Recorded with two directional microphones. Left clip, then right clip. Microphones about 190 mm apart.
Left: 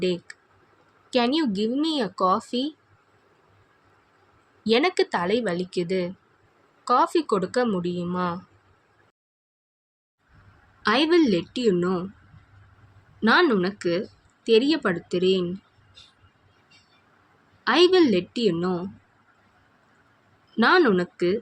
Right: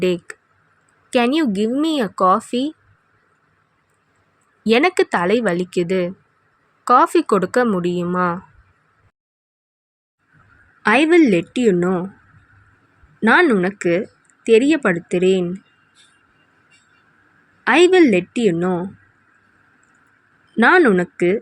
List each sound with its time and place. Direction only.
0.0 s speech: 30° right (ahead or behind)
4.6 s speech: 35° right (ahead or behind)
10.8 s speech: 35° right (ahead or behind)
13.1 s speech: 25° right (ahead or behind)
17.6 s speech: 30° right (ahead or behind)
20.6 s speech: 25° right (ahead or behind)